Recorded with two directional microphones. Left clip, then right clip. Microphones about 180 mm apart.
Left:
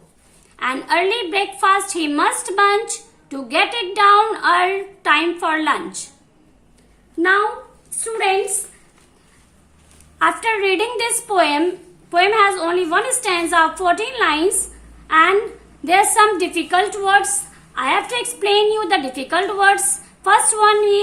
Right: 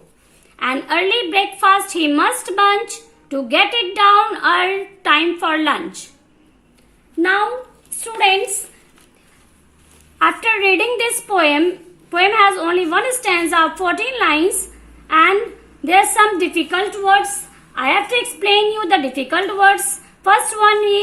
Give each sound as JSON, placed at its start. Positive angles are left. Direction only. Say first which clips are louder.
{"t": 0.5, "sound": "a woman's voice", "louder": "even", "side_deg": -30}
{"t": 10.2, "sound": "a woman's voice", "louder": "right 2 dB", "side_deg": -30}